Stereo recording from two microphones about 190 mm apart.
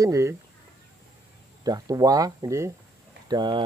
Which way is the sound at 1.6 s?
20° right (ahead or behind).